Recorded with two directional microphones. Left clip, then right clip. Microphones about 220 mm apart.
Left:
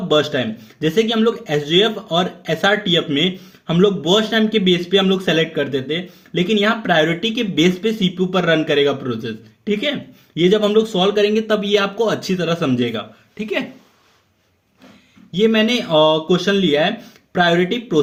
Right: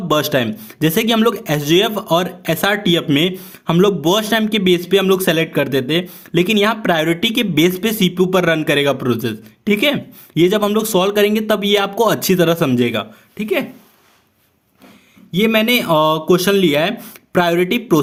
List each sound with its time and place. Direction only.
0.1 s speech: 45° right (ahead or behind)
13.3 s speech: 25° right (ahead or behind)
15.3 s speech: 35° right (ahead or behind)